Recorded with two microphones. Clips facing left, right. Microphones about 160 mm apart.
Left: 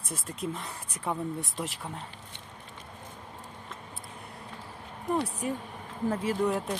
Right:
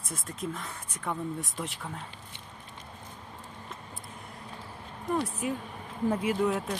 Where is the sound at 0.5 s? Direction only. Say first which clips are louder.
Left 1 dB; 30° left (ahead or behind).